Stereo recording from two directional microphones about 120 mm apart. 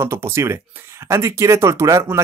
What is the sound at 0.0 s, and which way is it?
Speech, 25° right (ahead or behind).